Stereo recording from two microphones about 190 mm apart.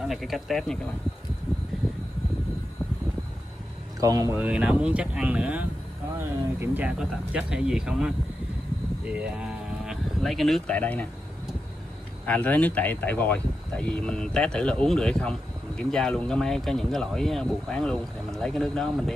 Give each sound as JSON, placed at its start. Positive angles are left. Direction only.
{"t": 0.0, "sound": "speech", "side_deg": 0}
{"t": 4.0, "sound": "speech", "side_deg": -15}
{"t": 9.2, "sound": "speech", "side_deg": -5}
{"t": 12.3, "sound": "speech", "side_deg": 10}